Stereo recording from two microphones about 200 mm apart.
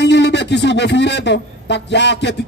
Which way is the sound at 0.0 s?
60° left (ahead or behind).